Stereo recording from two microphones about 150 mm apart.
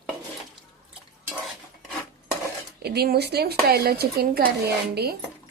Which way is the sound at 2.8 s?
90° right.